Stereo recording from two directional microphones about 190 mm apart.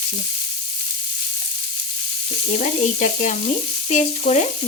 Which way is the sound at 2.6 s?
40° left (ahead or behind).